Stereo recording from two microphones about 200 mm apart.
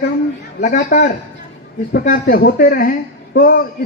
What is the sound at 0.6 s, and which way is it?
Speech, 45° left (ahead or behind).